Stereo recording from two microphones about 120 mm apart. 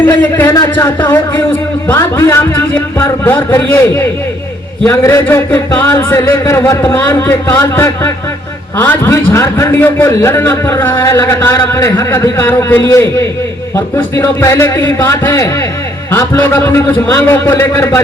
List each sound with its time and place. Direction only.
0.2 s a man's voice: 15° left (ahead or behind)
0.5 s speech: 30° left (ahead or behind)
1.9 s a man's voice: 20° left (ahead or behind)